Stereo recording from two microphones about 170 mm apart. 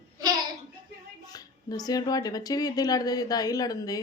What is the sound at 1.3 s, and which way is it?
Speech, 20° left (ahead or behind).